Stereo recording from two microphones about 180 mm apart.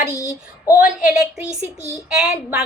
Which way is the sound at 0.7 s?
5° right (ahead or behind).